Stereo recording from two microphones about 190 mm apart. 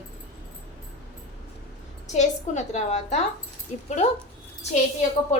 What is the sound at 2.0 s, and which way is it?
A woman's voice, 40° left (ahead or behind).